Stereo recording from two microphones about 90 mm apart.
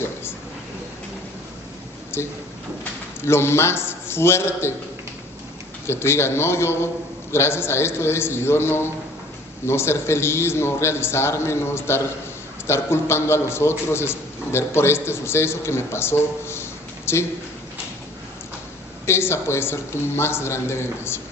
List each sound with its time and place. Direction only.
2.1 s a man's voice: 30° left (ahead or behind)
5.8 s a man's voice: 30° left (ahead or behind)
19.0 s a man's voice: 30° left (ahead or behind)